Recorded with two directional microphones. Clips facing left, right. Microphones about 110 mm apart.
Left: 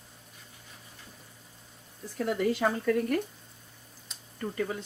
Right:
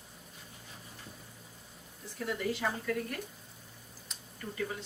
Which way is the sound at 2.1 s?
55° left (ahead or behind).